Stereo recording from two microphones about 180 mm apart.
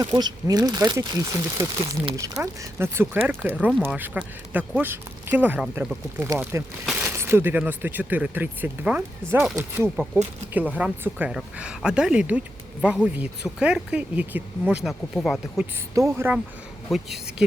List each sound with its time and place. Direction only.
0.0 s speech: 25° right (ahead or behind)
1.8 s speech: 30° right (ahead or behind)
2.1 s speech: 15° right (ahead or behind); by 15.6 s centre (ahead or behind)
16.0 s speech: 15° right (ahead or behind)
16.9 s speech: centre (ahead or behind)